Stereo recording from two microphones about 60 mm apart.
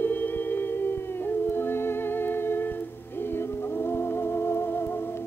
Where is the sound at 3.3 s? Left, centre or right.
Left.